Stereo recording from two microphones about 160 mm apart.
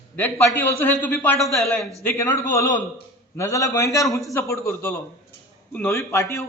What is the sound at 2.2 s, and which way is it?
A man's voice, 20° left (ahead or behind).